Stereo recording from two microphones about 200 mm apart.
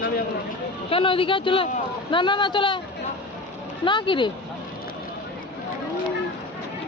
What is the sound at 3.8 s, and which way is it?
Speech, 25° left (ahead or behind).